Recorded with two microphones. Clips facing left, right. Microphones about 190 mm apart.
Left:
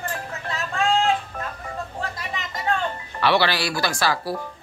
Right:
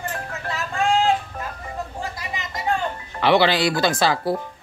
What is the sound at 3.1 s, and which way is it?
Speech, 20° right (ahead or behind).